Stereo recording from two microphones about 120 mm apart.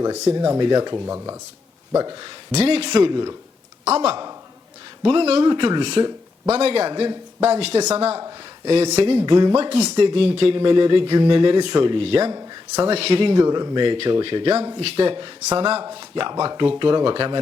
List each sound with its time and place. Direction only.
0.3 s speech: 35° right (ahead or behind)
0.9 s speech: 25° right (ahead or behind)
2.5 s speech: 60° right (ahead or behind)
2.9 s speech: 40° right (ahead or behind)
3.8 s speech: 60° right (ahead or behind)
5.5 s speech: 40° right (ahead or behind); by 9.2 s 60° right (ahead or behind)
9.2 s speech: 35° right (ahead or behind)
9.6 s speech: 55° right (ahead or behind)
9.9 s speech: 40° right (ahead or behind)
13.3 s speech: 35° right (ahead or behind)
14.5 s speech: 25° right (ahead or behind)
14.8 s speech: 50° right (ahead or behind)